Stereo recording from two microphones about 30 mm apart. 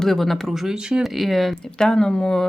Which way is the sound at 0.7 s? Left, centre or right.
Right.